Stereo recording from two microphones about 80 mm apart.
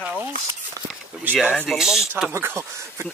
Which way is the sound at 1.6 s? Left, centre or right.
Centre.